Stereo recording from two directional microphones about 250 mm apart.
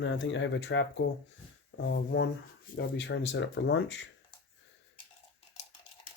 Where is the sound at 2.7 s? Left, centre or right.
Left.